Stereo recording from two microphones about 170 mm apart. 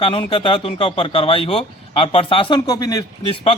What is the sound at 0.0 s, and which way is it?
Speech, 30° left (ahead or behind).